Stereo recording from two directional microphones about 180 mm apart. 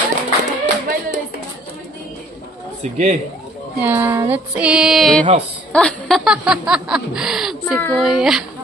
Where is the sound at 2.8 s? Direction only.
35° right (ahead or behind).